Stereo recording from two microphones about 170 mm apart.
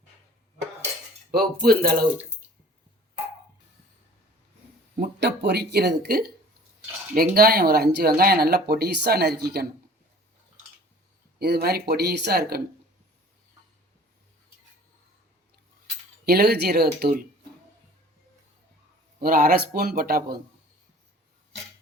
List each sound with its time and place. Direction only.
1.3 s speech: 60° right (ahead or behind)
4.9 s speech: 80° right
11.3 s speech: 70° right (ahead or behind)
16.2 s speech: 65° right (ahead or behind)
19.2 s speech: 60° right (ahead or behind)